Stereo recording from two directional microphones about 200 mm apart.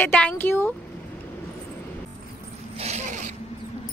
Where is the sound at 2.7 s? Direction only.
35° right (ahead or behind).